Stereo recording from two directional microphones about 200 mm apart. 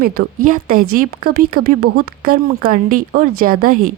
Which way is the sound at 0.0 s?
45° right (ahead or behind).